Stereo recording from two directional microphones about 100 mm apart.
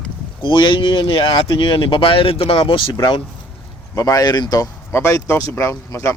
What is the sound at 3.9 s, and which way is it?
Speech, 40° left (ahead or behind).